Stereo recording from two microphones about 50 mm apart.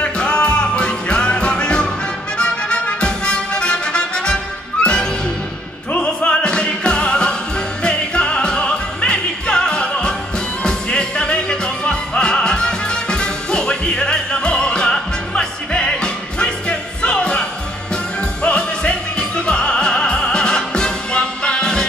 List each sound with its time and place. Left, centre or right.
0.0 s music: left